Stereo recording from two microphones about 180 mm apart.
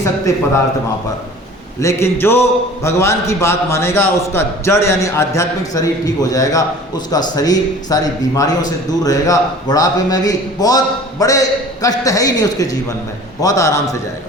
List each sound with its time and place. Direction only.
1.8 s a man's voice: 15° left (ahead or behind)